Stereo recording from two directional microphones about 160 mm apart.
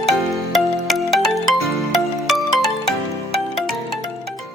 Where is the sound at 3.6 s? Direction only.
Centre (ahead or behind).